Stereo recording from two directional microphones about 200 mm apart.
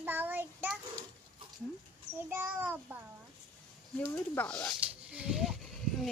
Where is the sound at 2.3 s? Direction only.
10° right (ahead or behind).